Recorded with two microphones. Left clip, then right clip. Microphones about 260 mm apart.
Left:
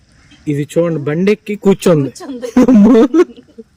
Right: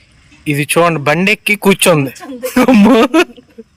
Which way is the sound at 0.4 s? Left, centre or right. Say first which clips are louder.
Right 2 dB; right.